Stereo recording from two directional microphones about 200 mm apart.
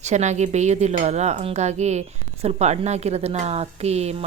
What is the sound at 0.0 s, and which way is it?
Cutlery, 35° right (ahead or behind).